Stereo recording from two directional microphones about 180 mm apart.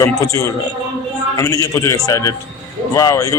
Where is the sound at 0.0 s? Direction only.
15° left (ahead or behind).